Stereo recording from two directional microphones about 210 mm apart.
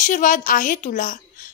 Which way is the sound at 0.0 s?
40° left (ahead or behind).